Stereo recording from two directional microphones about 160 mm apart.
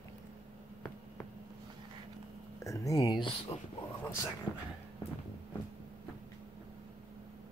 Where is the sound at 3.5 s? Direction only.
35° left (ahead or behind).